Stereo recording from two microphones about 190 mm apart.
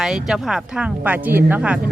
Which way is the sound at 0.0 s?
Centre (ahead or behind).